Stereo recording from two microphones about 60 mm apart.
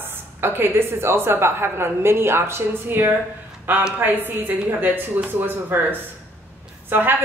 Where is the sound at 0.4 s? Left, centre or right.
Right.